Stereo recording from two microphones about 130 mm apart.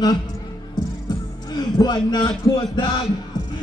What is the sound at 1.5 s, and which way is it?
Speech, 30° left (ahead or behind).